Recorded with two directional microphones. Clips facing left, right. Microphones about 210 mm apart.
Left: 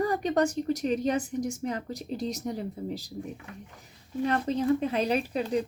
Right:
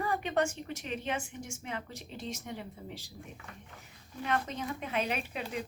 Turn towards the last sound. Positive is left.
turn(degrees=35)  # may be behind; listen again after turning